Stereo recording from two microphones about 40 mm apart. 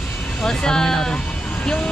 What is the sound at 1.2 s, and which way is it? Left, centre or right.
Music, left.